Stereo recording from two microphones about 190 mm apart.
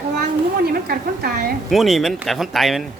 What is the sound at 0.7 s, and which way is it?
Speech, 55° right (ahead or behind).